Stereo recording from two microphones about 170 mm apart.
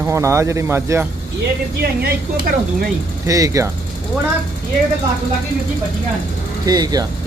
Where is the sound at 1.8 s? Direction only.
65° right (ahead or behind).